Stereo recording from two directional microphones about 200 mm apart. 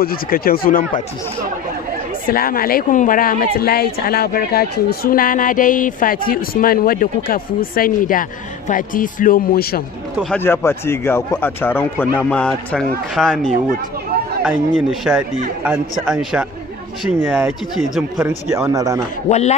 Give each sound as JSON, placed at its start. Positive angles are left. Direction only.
{"t": 0.0, "sound": "a woman's voice", "side_deg": 45}
{"t": 2.2, "sound": "a woman's voice", "side_deg": 45}
{"t": 10.3, "sound": "a man's voice", "side_deg": 10}
{"t": 14.9, "sound": "a man's voice", "side_deg": 0}
{"t": 19.2, "sound": "a man's voice", "side_deg": 35}